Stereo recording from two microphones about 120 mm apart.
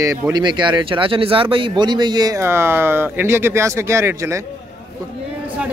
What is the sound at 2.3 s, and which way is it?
Speech, 20° right (ahead or behind).